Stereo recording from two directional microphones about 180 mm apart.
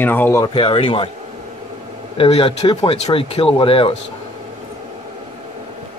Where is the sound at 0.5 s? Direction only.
30° left (ahead or behind).